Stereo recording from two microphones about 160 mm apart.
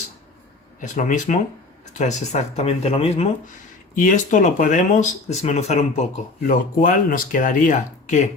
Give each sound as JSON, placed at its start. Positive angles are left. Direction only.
{"t": 0.8, "sound": "speech", "side_deg": 50}
{"t": 3.9, "sound": "speech", "side_deg": 55}
{"t": 6.5, "sound": "speech", "side_deg": 55}